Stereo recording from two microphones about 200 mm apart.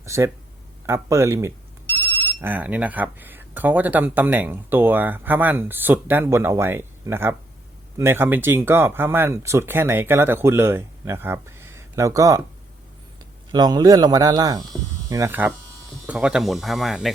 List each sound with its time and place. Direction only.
0.0 s speech: 15° right (ahead or behind)
13.5 s a man's voice: 20° right (ahead or behind); by 17.1 s centre (ahead or behind)